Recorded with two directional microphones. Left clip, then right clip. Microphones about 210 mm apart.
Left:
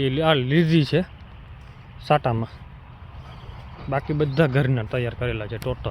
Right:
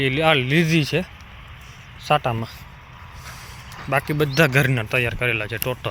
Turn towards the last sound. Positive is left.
turn(degrees=5)  # may be behind; listen again after turning